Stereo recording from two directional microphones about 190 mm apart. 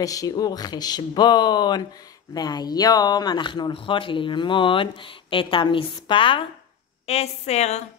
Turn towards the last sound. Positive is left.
turn(degrees=35)  # may be behind; listen again after turning